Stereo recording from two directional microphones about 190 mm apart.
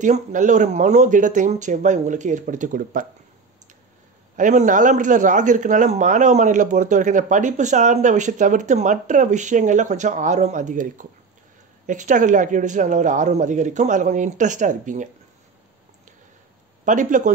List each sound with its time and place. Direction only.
0.0 s a man's voice: 40° right (ahead or behind)
4.4 s a man's voice: 40° right (ahead or behind)
16.8 s a man's voice: 40° right (ahead or behind)